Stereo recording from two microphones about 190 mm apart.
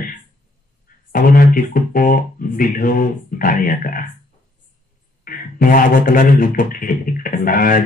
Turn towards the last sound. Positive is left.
turn(degrees=45)  # may be behind; listen again after turning